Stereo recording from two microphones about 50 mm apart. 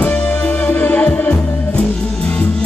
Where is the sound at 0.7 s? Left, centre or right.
Left.